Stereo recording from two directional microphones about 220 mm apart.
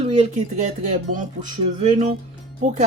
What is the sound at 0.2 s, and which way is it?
Speech, 35° right (ahead or behind).